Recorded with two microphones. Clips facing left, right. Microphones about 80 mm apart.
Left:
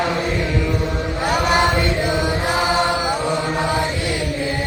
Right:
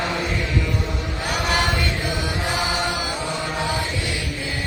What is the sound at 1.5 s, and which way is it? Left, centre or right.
Chant, left.